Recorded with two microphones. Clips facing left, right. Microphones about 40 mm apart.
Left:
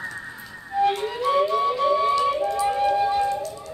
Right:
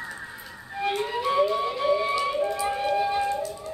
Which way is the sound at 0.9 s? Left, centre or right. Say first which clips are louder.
Left 3 dB; centre.